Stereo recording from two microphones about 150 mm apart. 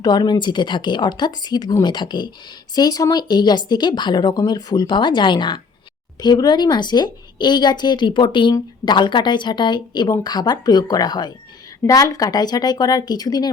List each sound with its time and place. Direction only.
0.0 s speech: 25° left (ahead or behind)